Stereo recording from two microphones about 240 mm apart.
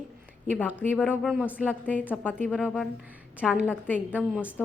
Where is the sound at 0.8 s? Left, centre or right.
Centre.